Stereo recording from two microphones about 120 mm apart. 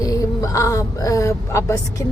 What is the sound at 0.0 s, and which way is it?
Speech, 30° left (ahead or behind).